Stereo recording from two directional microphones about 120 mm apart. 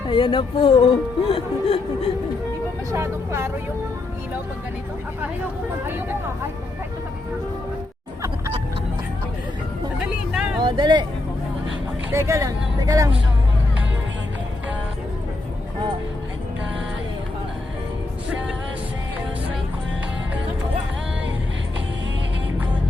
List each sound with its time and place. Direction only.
0.1 s speech: 45° left (ahead or behind)
2.9 s speech: 25° right (ahead or behind)
10.3 s vehicle: centre (ahead or behind)
10.6 s speech: 40° right (ahead or behind)
12.1 s speech: 25° right (ahead or behind)